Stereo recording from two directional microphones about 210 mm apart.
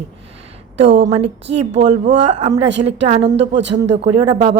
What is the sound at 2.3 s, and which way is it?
Speech, 35° right (ahead or behind).